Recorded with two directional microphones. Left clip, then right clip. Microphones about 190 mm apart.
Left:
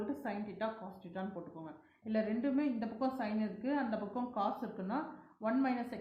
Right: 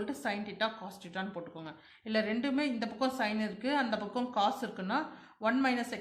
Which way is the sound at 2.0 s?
35° right (ahead or behind).